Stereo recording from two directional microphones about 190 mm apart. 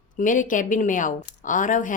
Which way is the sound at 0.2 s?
45° left (ahead or behind).